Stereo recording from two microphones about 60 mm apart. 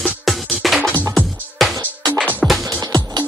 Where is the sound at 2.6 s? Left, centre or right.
Right.